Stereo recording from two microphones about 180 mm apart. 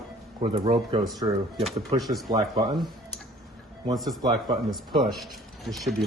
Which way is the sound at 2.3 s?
25° right (ahead or behind).